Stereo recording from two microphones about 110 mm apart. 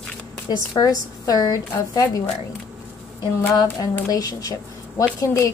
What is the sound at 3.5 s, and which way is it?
Speech, 35° left (ahead or behind).